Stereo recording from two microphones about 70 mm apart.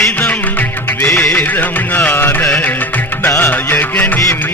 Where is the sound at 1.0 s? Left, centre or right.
Centre.